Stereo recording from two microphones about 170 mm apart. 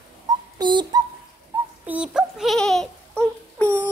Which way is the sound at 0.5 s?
25° right (ahead or behind).